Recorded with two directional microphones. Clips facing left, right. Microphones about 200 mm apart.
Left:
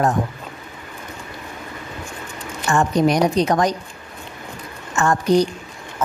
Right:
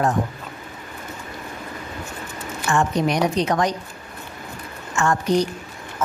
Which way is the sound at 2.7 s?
40° left (ahead or behind).